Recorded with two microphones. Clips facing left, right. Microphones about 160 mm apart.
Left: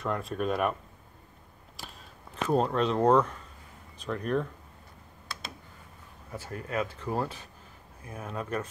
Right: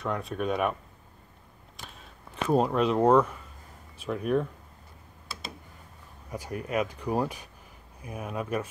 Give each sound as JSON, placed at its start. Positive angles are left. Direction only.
{"t": 0.0, "sound": "speech", "side_deg": 0}
{"t": 2.5, "sound": "speech", "side_deg": -10}
{"t": 5.3, "sound": "tick", "side_deg": -5}
{"t": 6.3, "sound": "speech", "side_deg": -15}